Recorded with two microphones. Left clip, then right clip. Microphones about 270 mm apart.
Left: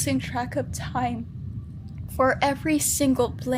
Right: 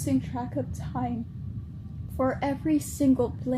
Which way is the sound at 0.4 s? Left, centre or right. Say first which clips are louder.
Left 5 dB; left.